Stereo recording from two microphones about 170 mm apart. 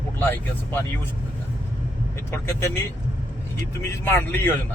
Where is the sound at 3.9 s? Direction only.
15° left (ahead or behind).